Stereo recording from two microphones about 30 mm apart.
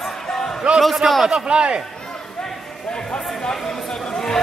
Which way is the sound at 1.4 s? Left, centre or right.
Right.